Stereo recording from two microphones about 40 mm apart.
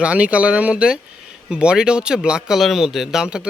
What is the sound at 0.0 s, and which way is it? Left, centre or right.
Speech, right.